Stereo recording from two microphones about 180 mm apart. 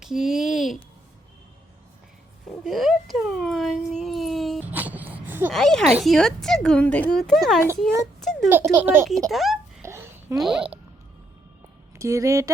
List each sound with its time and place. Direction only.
0.0 s speech: centre (ahead or behind)
2.5 s speech: centre (ahead or behind)
4.7 s a sound: 10° right (ahead or behind)
5.5 s a woman's voice: 5° left (ahead or behind)
8.2 s a sound: centre (ahead or behind)
8.4 s speech: 15° right (ahead or behind)
9.3 s a woman's voice: centre (ahead or behind)
9.8 s babbling: 15° right (ahead or behind)
10.3 s a woman's voice: 5° right (ahead or behind)
11.9 s speech: 15° right (ahead or behind)